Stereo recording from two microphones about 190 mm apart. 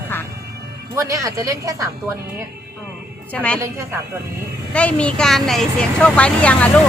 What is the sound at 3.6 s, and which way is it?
Speech, 15° right (ahead or behind).